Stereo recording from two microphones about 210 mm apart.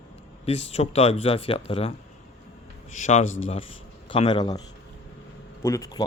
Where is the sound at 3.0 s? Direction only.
35° left (ahead or behind).